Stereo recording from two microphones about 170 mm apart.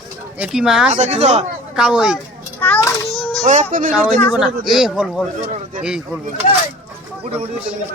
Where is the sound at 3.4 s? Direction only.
45° right (ahead or behind).